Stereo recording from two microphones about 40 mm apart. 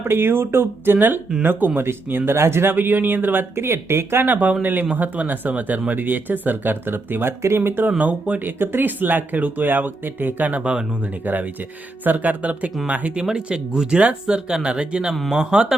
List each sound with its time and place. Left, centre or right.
0.0 s speech: right
0.9 s speech: right
2.3 s speech: right
2.7 s speech: right
3.5 s speech: right
4.3 s speech: right
7.9 s speech: right
8.4 s speech: right
13.1 s speech: right